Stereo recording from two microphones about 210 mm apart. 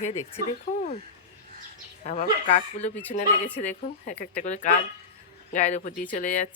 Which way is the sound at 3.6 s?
35° left (ahead or behind).